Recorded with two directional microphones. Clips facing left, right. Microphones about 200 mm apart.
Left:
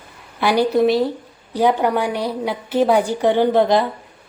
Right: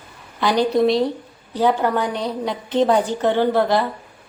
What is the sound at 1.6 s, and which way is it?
A woman's voice, 15° left (ahead or behind).